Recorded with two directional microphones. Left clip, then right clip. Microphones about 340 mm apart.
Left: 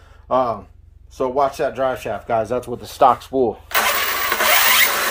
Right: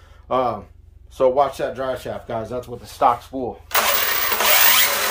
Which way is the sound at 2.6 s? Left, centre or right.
Left.